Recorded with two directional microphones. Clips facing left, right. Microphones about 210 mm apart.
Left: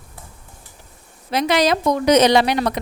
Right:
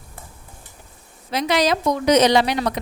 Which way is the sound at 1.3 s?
60° left (ahead or behind).